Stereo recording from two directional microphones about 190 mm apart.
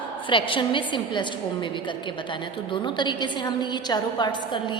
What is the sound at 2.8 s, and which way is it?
A woman's voice, 25° left (ahead or behind).